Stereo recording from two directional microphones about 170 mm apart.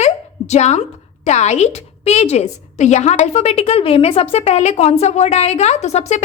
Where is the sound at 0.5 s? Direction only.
40° left (ahead or behind).